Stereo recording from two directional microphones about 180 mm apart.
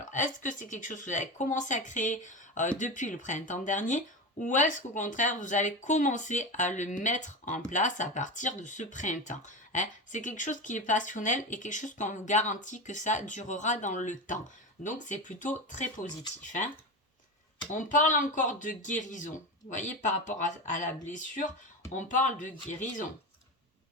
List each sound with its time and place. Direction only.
0.0 s speech: 45° left (ahead or behind)
17.7 s speech: 45° left (ahead or behind)